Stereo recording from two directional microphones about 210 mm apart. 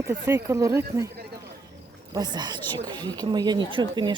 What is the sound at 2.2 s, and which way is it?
Speech, 20° right (ahead or behind).